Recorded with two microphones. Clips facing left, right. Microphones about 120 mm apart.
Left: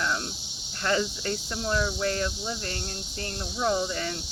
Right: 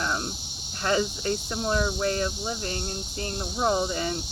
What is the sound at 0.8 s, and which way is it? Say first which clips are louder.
Speech: right 2 dB; 20° right (ahead or behind).